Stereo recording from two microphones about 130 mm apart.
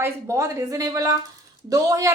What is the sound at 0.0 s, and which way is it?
A woman's voice, 25° right (ahead or behind).